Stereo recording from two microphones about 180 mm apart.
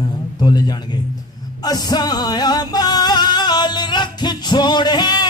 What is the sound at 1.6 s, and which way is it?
Music, 20° left (ahead or behind).